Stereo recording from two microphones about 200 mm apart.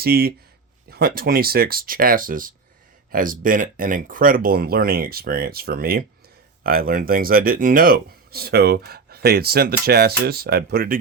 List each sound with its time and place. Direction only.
0.0 s speech: 50° right (ahead or behind)